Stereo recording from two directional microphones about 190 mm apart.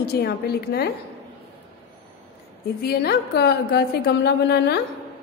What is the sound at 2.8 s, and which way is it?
A woman's voice, 55° left (ahead or behind).